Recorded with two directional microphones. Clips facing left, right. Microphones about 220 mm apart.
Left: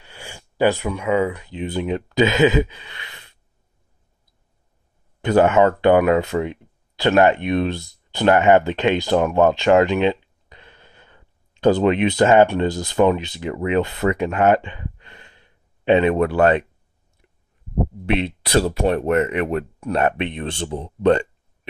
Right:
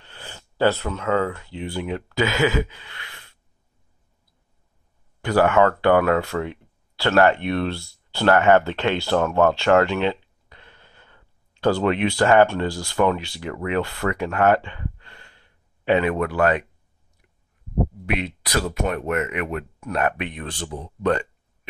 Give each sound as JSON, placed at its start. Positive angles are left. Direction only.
{"t": 0.0, "sound": "speech", "side_deg": 10}
{"t": 5.2, "sound": "speech", "side_deg": 20}
{"t": 18.0, "sound": "speech", "side_deg": 30}